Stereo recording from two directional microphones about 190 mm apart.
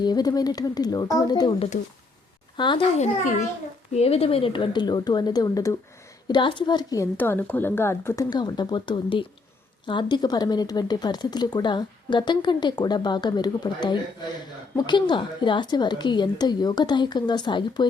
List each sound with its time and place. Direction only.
0.0 s a woman's voice: 20° left (ahead or behind)